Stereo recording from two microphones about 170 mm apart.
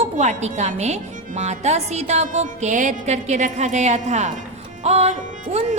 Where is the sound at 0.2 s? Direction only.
45° right (ahead or behind).